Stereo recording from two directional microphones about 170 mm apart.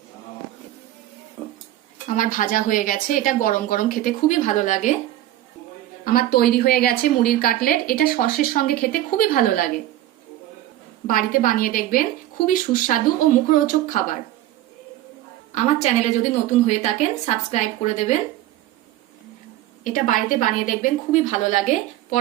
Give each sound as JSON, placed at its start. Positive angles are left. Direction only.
{"t": 2.0, "sound": "a woman's voice", "side_deg": 50}
{"t": 6.1, "sound": "a woman's voice", "side_deg": 60}
{"t": 11.0, "sound": "a woman's voice", "side_deg": 55}
{"t": 15.5, "sound": "a woman's voice", "side_deg": 40}
{"t": 19.8, "sound": "a woman's voice", "side_deg": 50}